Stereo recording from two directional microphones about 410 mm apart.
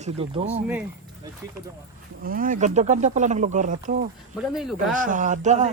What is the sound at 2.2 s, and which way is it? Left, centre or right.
Speech, right.